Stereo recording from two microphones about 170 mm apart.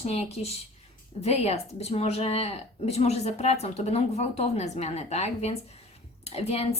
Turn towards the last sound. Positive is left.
turn(degrees=35)  # may be behind; listen again after turning